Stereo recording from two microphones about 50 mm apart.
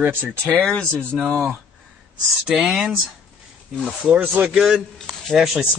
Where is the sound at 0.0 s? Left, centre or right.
Right.